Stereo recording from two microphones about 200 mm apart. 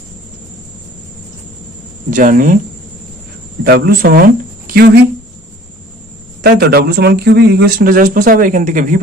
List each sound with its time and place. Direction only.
2.0 s speech: 40° right (ahead or behind)
3.6 s speech: 50° right (ahead or behind)
6.4 s speech: 50° right (ahead or behind)